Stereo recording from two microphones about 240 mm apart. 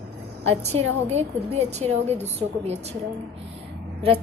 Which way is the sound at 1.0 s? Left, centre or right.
Right.